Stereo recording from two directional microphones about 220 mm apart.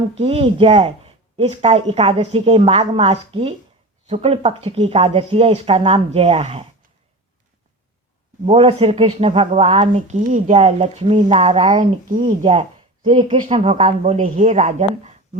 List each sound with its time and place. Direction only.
0.1 s a woman's voice: 25° right (ahead or behind)
8.4 s a woman's voice: 25° right (ahead or behind)